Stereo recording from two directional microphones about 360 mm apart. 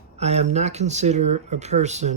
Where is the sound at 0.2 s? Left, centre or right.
Centre.